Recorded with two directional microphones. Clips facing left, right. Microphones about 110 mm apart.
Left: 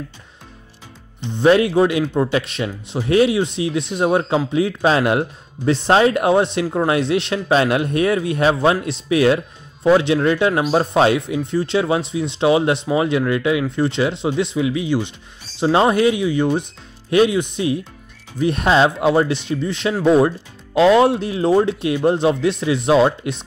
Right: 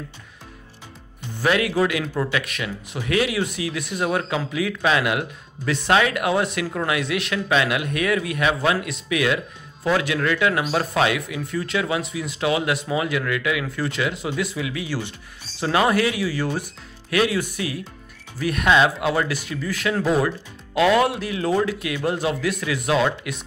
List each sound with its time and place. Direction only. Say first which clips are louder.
1.2 s speech: left 8 dB; 25° left (ahead or behind)